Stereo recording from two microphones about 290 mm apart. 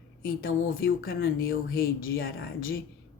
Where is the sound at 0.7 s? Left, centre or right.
Left.